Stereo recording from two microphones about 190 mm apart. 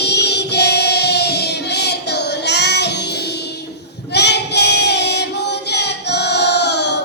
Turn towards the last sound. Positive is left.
turn(degrees=65)  # may be behind; listen again after turning